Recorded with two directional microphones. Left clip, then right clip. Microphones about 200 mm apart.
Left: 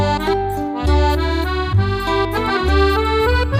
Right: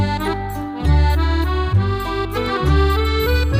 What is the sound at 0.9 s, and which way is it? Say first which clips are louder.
Accordion: left 5 dB; 5° left (ahead or behind).